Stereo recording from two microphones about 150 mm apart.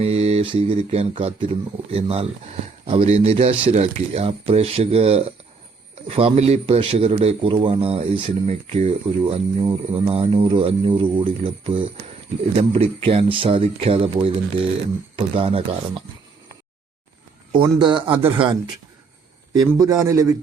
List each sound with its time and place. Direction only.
0.0 s speech: 45° right (ahead or behind)
15.4 s speech: 40° right (ahead or behind)
17.5 s speech: 30° right (ahead or behind)
19.6 s a man's voice: 25° right (ahead or behind)